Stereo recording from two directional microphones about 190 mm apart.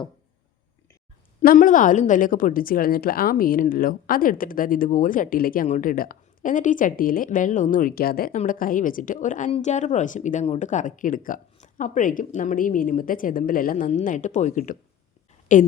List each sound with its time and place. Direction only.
1.4 s a woman's voice: 45° left (ahead or behind)